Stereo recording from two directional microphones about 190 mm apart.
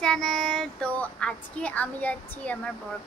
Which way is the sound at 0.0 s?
5° left (ahead or behind).